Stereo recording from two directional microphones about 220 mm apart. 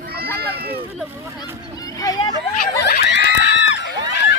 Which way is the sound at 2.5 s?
40° left (ahead or behind).